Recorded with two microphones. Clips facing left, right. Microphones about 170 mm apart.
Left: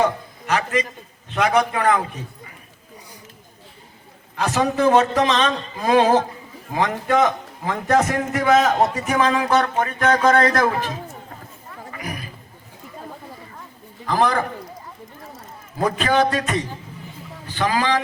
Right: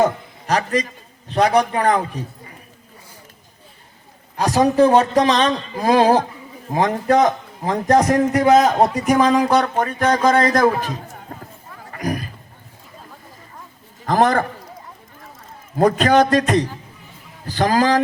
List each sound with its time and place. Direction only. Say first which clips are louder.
0.0 s a man's voice: right 3 dB; 35° right (ahead or behind)
4.4 s a man's voice: right 6 dB; 35° right (ahead or behind)
11.9 s roaring cats: right 8 dB; 45° right (ahead or behind)
14.0 s a man's voice: right 3 dB; 45° right (ahead or behind)
15.8 s a man's voice: right 5 dB; 40° right (ahead or behind)